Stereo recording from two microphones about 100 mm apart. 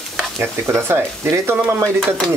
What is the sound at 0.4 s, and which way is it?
Stir, 25° right (ahead or behind).